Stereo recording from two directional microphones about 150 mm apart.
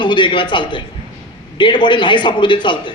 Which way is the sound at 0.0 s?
30° left (ahead or behind).